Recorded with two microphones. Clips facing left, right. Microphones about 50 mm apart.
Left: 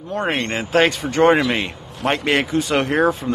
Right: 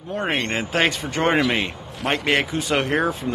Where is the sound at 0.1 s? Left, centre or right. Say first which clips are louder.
Left 2 dB; centre.